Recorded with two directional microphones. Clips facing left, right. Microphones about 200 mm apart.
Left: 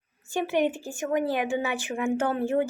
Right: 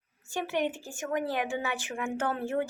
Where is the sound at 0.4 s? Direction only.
10° left (ahead or behind).